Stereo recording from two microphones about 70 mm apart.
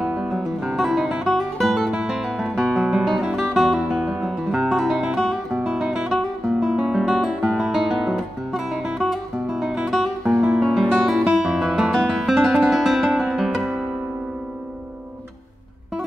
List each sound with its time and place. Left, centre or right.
0.0 s music: centre
5.6 s guitar: centre
9.0 s music: centre
10.6 s guitar: centre